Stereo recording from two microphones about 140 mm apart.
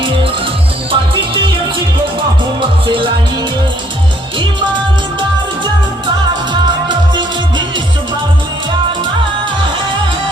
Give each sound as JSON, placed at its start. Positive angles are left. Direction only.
{"t": 0.9, "sound": "music", "side_deg": -40}
{"t": 2.6, "sound": "music", "side_deg": -40}
{"t": 6.5, "sound": "music", "side_deg": -35}